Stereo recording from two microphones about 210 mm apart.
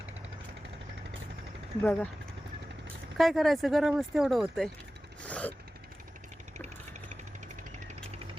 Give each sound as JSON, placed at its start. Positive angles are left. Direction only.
{"t": 1.8, "sound": "speech", "side_deg": 5}
{"t": 3.2, "sound": "speech", "side_deg": 0}
{"t": 5.2, "sound": "a sound", "side_deg": 5}